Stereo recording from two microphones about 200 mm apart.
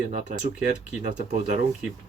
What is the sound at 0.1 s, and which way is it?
Speech, 40° right (ahead or behind).